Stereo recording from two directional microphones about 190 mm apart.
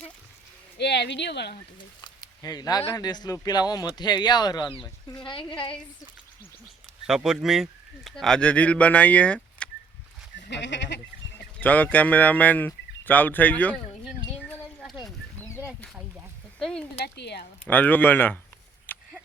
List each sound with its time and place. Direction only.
0.8 s speech: 60° left (ahead or behind)
2.0 s a sound: 20° left (ahead or behind)
2.9 s speech: 20° left (ahead or behind)
7.1 s speech: 5° right (ahead or behind)
10.3 s goat: 70° left (ahead or behind)
11.6 s speech: 10° left (ahead or behind)
14.8 s a sound: centre (ahead or behind)
16.6 s speech: 5° left (ahead or behind)
17.0 s speech: 60° left (ahead or behind)
17.7 s speech: 10° left (ahead or behind)
18.9 s a sound: 10° left (ahead or behind)